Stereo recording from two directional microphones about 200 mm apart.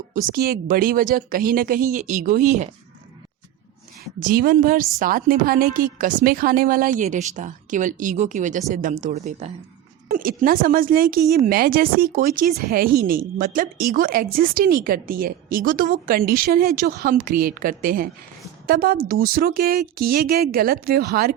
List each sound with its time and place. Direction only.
0.1 s speech: 45° right (ahead or behind)
4.2 s a woman's voice: 45° right (ahead or behind)
10.1 s speech: 45° right (ahead or behind)